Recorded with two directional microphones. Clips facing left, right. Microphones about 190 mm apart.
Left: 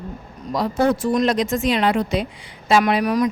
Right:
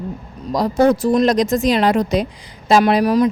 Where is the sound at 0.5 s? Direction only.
40° right (ahead or behind).